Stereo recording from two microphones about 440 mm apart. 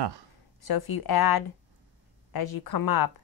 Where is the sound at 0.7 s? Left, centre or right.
Left.